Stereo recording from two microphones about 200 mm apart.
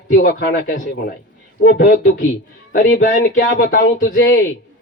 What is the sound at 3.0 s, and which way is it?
Speech, 40° left (ahead or behind).